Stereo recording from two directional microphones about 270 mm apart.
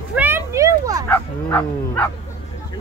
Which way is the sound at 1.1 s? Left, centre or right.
Centre.